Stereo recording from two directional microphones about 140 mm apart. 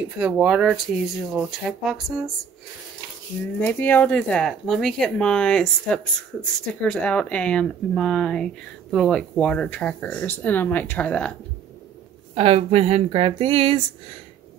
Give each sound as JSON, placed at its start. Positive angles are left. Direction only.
{"t": 0.2, "sound": "speech", "side_deg": -5}
{"t": 3.6, "sound": "speech", "side_deg": 10}
{"t": 12.4, "sound": "speech", "side_deg": -45}